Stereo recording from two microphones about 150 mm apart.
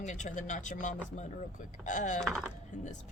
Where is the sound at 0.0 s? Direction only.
55° left (ahead or behind).